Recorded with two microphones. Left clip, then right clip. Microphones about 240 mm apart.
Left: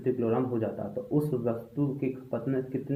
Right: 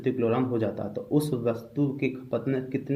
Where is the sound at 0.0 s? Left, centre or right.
Right.